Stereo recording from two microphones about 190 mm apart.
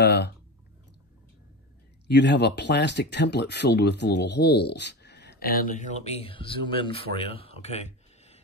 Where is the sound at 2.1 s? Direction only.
65° left (ahead or behind); by 8.4 s 35° left (ahead or behind).